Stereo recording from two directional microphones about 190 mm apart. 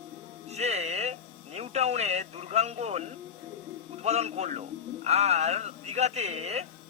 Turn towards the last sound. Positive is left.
turn(degrees=-35)  # may be behind; listen again after turning